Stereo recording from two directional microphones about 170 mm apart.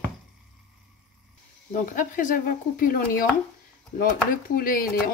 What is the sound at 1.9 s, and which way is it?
Speech, 50° left (ahead or behind).